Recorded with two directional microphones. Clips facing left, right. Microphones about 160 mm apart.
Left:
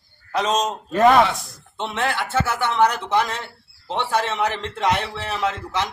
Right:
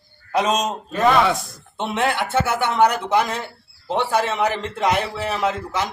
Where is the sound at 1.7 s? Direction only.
15° right (ahead or behind).